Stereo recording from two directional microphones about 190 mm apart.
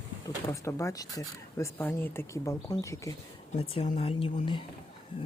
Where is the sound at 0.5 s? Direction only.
15° left (ahead or behind).